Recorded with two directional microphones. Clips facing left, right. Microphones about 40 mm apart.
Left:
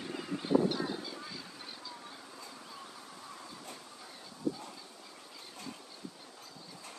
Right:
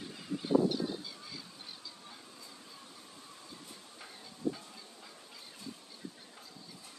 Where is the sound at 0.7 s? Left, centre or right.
Centre.